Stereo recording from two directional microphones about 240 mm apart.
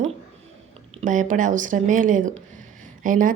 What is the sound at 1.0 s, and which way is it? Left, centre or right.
A woman's voice, right.